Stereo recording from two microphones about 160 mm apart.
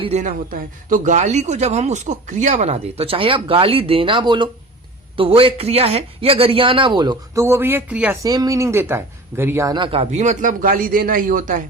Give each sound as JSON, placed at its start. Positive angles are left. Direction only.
{"t": 0.0, "sound": "a man's voice", "side_deg": -45}
{"t": 8.2, "sound": "speech", "side_deg": -20}
{"t": 9.7, "sound": "a man's voice", "side_deg": -35}